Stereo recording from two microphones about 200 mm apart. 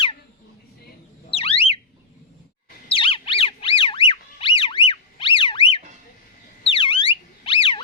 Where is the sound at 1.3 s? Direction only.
30° left (ahead or behind).